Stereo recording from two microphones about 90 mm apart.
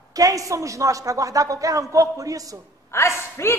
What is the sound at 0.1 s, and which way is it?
A woman's voice, 40° right (ahead or behind).